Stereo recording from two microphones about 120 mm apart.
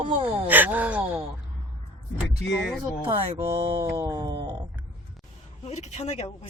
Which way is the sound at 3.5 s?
50° right (ahead or behind).